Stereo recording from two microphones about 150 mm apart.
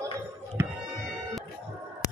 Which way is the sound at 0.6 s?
15° right (ahead or behind).